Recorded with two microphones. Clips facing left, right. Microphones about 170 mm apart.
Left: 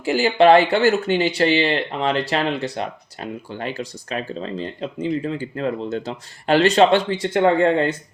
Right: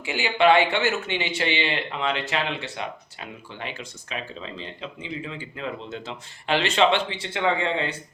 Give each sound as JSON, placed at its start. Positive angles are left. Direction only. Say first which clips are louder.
{"t": 0.0, "sound": "speech", "louder": "left 6 dB", "side_deg": 40}